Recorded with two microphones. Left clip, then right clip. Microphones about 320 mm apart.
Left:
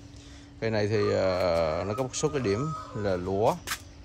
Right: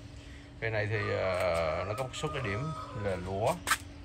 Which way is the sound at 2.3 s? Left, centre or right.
Left.